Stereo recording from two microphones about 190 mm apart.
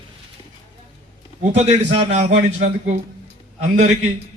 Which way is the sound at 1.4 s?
35° right (ahead or behind).